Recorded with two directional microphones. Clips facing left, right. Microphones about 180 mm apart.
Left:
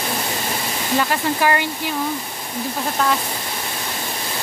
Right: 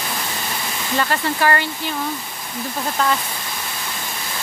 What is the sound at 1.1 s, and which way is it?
Speech, 10° left (ahead or behind).